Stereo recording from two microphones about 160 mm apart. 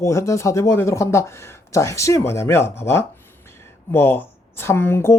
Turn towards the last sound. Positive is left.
turn(degrees=15)  # may be behind; listen again after turning